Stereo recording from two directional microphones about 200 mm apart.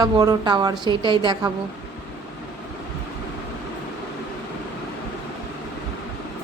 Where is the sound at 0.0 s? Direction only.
20° right (ahead or behind).